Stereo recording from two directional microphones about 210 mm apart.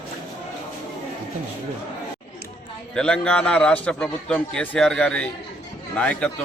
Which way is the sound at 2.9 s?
5° left (ahead or behind).